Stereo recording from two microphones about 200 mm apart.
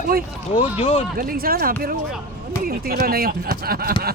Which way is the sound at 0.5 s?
25° left (ahead or behind).